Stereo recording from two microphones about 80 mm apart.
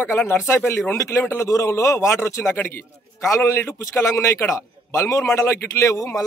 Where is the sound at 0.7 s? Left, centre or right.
Left.